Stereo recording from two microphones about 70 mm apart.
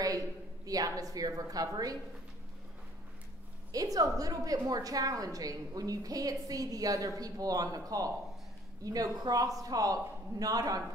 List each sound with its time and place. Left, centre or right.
0.7 s a woman's voice: right
3.7 s a woman's voice: right